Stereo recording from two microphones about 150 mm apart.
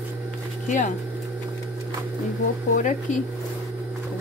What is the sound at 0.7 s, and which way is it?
Speech, 55° left (ahead or behind).